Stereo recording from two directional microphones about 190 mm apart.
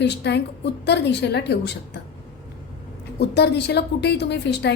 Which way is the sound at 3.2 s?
60° left (ahead or behind).